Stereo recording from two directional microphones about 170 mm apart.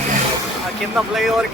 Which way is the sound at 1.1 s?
Centre (ahead or behind).